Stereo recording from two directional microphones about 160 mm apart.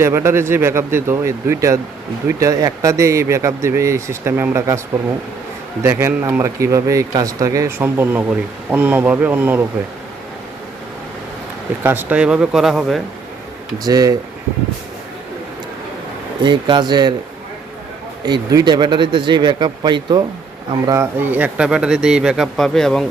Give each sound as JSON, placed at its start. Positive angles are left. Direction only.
{"t": 0.0, "sound": "speech", "side_deg": -15}
{"t": 5.8, "sound": "speech", "side_deg": -15}
{"t": 11.8, "sound": "speech", "side_deg": -10}
{"t": 13.8, "sound": "speech", "side_deg": -25}
{"t": 16.4, "sound": "speech", "side_deg": -30}
{"t": 18.2, "sound": "speech", "side_deg": -25}
{"t": 20.8, "sound": "speech", "side_deg": -15}